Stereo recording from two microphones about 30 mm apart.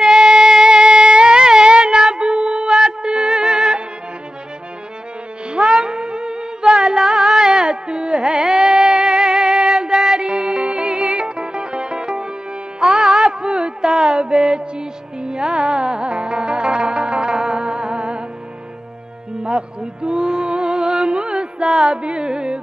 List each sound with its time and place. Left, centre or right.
0.0 s music: centre
1.1 s music: right
2.1 s child singing: right
3.0 s music: right
5.9 s music: right
7.0 s music: centre
7.4 s carnatic music: right
8.5 s a sound: centre
9.1 s music: centre
12.8 s music: centre
13.4 s a sound: right
13.8 s music: centre
14.5 s music: right
19.4 s music: right